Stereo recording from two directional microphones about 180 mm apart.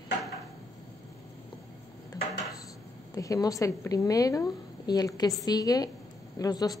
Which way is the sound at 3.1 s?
20° left (ahead or behind).